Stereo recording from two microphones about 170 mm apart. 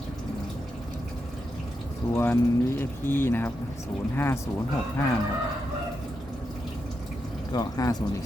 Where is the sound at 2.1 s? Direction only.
15° left (ahead or behind).